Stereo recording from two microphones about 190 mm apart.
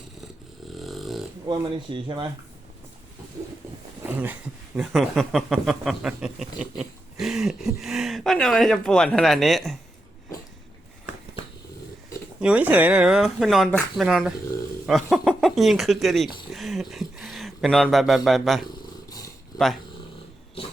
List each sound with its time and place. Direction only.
0.8 s dog: centre (ahead or behind)
1.5 s speech: 25° right (ahead or behind)
4.0 s speech: 10° right (ahead or behind)
12.4 s speech: 5° right (ahead or behind)
19.5 s speech: 20° left (ahead or behind)